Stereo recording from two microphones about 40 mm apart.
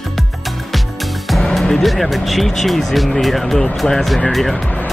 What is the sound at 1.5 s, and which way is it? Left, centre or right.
Speech, centre.